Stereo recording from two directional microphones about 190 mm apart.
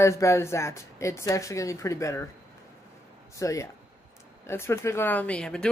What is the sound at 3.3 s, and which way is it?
A man's voice, 15° left (ahead or behind).